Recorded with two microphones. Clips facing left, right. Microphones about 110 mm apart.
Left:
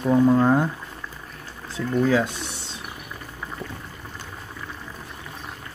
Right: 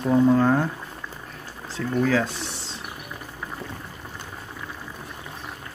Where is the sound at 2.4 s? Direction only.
90° right.